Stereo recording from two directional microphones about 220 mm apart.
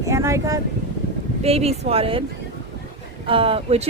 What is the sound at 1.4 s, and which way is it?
Speech, 25° right (ahead or behind).